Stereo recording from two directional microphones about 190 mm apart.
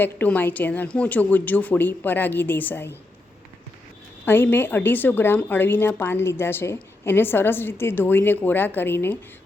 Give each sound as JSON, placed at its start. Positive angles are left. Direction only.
{"t": 0.0, "sound": "a woman's voice", "side_deg": 10}
{"t": 4.3, "sound": "a woman's voice", "side_deg": 10}